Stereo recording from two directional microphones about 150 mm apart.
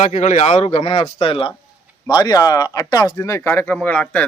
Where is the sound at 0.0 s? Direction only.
50° left (ahead or behind).